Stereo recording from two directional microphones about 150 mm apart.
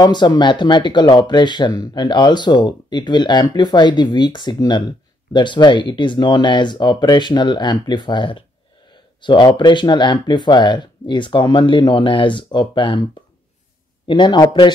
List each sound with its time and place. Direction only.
0.0 s speech: 30° left (ahead or behind)
14.0 s speech: 30° left (ahead or behind)